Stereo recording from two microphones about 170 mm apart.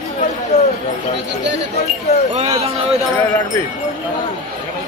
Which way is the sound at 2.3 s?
40° right (ahead or behind).